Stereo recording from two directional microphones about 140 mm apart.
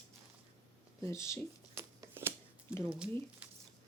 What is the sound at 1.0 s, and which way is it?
Speech, 20° left (ahead or behind).